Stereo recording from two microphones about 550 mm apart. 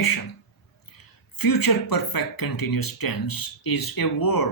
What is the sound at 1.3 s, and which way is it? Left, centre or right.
Speech, left.